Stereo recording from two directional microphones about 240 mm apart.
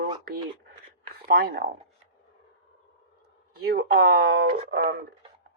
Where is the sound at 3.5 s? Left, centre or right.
Right.